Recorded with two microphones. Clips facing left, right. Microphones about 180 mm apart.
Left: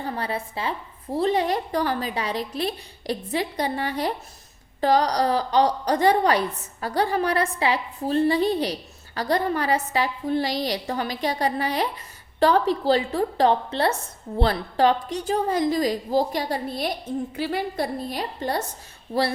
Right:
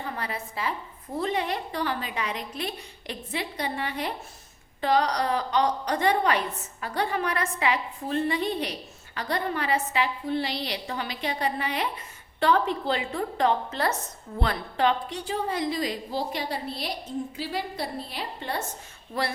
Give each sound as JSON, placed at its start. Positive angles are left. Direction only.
{"t": 0.0, "sound": "a woman's voice", "side_deg": 30}